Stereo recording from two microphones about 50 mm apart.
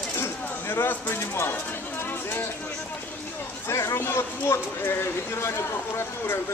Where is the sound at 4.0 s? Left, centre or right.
Left.